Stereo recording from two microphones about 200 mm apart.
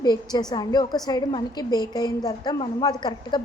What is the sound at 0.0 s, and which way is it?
A woman's voice, 20° left (ahead or behind).